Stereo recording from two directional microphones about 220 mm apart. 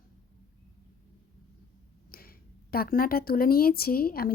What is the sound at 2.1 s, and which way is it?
Speech, 45° left (ahead or behind).